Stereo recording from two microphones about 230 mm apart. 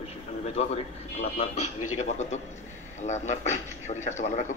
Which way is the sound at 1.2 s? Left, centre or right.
Left.